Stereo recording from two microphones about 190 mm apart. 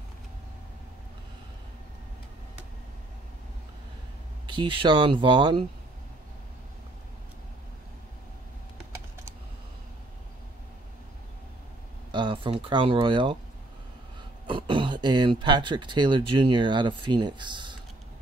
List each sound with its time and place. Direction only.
4.5 s speech: 25° right (ahead or behind)
12.1 s speech: 25° right (ahead or behind)
14.5 s speech: 25° right (ahead or behind)